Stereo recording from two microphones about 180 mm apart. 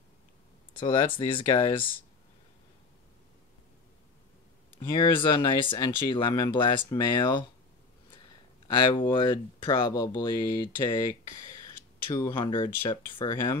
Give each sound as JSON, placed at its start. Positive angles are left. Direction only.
{"t": 0.7, "sound": "speech", "side_deg": 30}
{"t": 4.7, "sound": "speech", "side_deg": 25}
{"t": 8.7, "sound": "speech", "side_deg": 25}
{"t": 12.1, "sound": "speech", "side_deg": 25}